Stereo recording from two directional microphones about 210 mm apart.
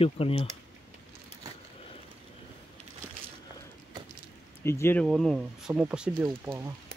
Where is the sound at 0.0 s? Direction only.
25° left (ahead or behind).